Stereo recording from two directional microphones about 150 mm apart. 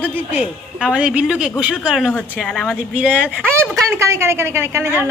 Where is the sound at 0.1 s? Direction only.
10° right (ahead or behind).